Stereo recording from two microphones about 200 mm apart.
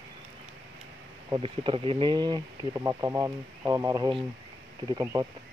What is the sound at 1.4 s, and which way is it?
Speech, 25° right (ahead or behind).